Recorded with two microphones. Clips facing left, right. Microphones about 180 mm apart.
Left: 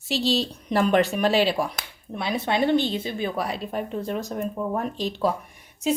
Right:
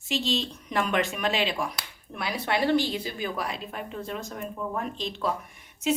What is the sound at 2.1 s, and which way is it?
Speech, 25° left (ahead or behind).